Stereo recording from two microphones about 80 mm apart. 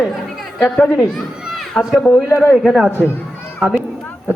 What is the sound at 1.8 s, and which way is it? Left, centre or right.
Speech, centre.